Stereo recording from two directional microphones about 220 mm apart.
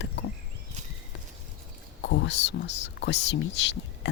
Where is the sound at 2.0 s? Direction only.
55° left (ahead or behind).